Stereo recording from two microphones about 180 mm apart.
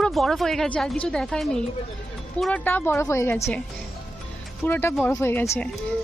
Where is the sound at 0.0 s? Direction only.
Centre (ahead or behind).